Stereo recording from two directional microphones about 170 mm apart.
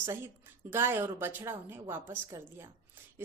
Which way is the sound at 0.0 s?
15° right (ahead or behind).